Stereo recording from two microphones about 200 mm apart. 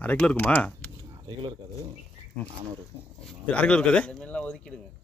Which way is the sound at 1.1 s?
25° right (ahead or behind).